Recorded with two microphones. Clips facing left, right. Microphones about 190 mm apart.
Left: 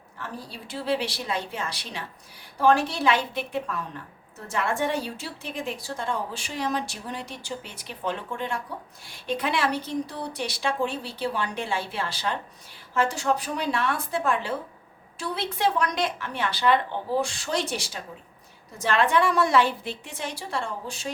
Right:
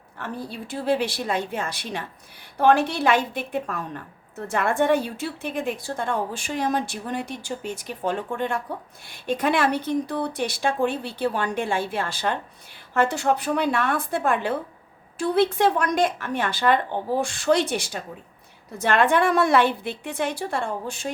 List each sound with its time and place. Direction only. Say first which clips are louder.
0.2 s a woman's voice: right 5 dB; 55° right (ahead or behind)